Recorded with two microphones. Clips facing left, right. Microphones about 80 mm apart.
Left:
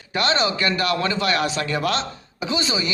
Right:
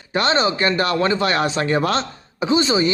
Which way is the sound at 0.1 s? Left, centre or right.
Right.